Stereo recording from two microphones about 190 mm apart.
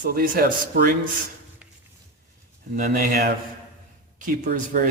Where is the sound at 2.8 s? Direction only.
40° right (ahead or behind).